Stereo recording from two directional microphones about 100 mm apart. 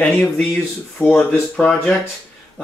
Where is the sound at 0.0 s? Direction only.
10° left (ahead or behind).